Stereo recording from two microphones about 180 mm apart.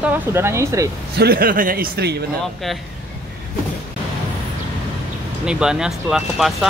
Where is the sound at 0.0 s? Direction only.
15° right (ahead or behind).